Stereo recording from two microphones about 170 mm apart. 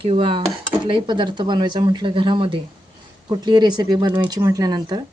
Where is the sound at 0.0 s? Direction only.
30° right (ahead or behind).